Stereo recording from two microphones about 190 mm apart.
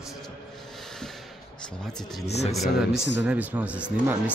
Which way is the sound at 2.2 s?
35° left (ahead or behind).